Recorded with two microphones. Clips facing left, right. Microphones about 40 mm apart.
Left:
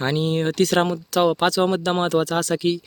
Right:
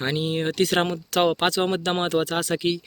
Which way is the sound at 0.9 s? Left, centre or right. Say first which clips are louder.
Left 2 dB; right.